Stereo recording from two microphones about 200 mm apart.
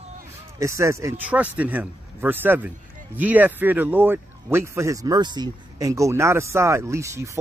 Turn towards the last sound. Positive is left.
turn(degrees=-15)  # may be behind; listen again after turning